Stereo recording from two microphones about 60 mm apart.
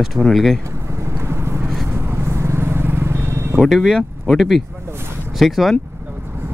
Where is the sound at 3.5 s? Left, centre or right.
Centre.